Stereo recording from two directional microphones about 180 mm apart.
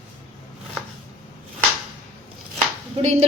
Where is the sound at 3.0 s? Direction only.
35° right (ahead or behind).